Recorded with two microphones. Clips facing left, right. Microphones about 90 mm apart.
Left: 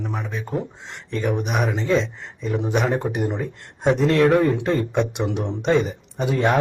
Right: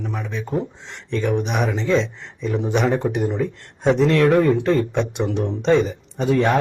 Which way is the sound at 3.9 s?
Centre (ahead or behind).